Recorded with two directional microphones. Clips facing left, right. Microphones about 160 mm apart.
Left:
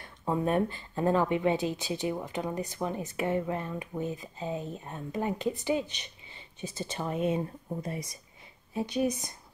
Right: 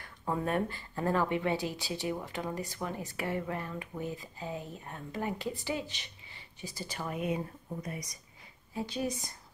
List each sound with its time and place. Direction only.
0.0 s speech: 20° left (ahead or behind)